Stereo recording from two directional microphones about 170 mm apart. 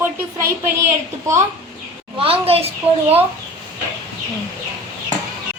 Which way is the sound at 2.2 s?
35° right (ahead or behind).